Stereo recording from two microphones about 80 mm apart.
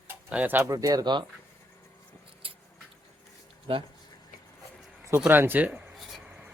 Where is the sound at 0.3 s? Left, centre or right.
Centre.